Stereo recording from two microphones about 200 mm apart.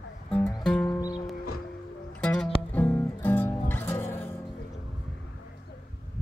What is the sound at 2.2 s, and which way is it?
Music, 5° left (ahead or behind).